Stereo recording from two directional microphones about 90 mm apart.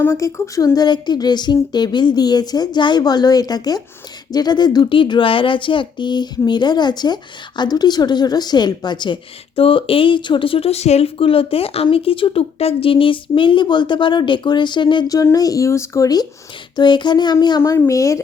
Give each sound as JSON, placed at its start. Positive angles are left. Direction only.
{"t": 0.0, "sound": "speech", "side_deg": 30}
{"t": 9.6, "sound": "speech", "side_deg": 90}
{"t": 15.1, "sound": "speech", "side_deg": 40}
{"t": 16.7, "sound": "a sound", "side_deg": 55}
{"t": 17.6, "sound": "speech", "side_deg": 30}